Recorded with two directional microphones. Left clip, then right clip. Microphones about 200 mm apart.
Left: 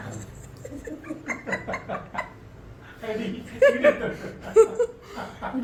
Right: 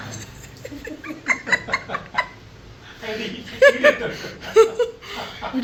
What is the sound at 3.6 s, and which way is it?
Speech, 5° right (ahead or behind).